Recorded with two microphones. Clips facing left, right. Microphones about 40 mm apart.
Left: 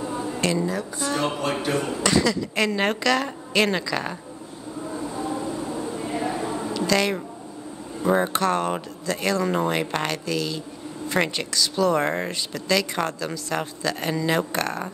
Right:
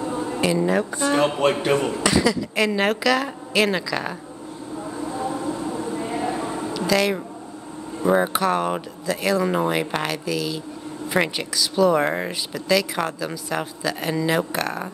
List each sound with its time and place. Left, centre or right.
0.0 s a sound: right
0.3 s a sound: centre
0.7 s speech: right
2.0 s speech: centre
4.9 s train: centre
6.3 s music: centre
6.9 s speech: centre